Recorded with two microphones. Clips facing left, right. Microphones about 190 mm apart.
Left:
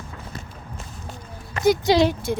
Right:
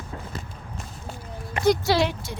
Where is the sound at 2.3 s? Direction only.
55° left (ahead or behind).